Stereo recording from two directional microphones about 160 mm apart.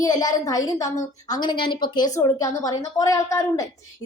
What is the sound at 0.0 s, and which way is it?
A woman's voice, 25° left (ahead or behind).